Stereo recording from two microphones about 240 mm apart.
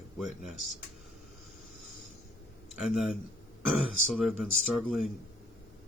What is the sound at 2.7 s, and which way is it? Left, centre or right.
Speech, centre.